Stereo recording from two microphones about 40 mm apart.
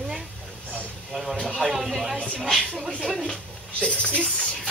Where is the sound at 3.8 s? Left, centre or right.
Left.